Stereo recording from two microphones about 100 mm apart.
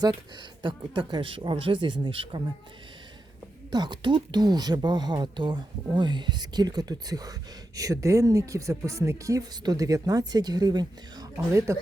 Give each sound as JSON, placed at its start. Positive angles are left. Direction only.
{"t": 0.6, "sound": "speech", "side_deg": -55}
{"t": 3.7, "sound": "speech", "side_deg": -45}
{"t": 11.5, "sound": "speech", "side_deg": -30}